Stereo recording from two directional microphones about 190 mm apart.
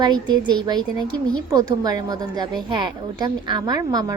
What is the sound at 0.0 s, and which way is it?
A woman's voice, 20° right (ahead or behind).